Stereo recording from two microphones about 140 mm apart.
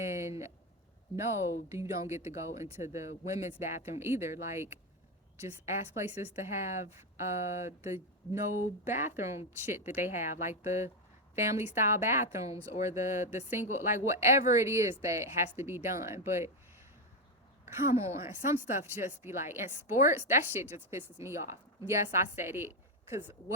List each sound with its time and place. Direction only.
0.0 s a sound: 20° right (ahead or behind)
1.1 s a woman's voice: 20° right (ahead or behind)
17.9 s speech: 20° right (ahead or behind)